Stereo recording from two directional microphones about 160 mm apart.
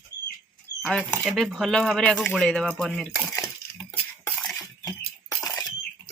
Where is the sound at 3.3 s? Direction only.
20° left (ahead or behind).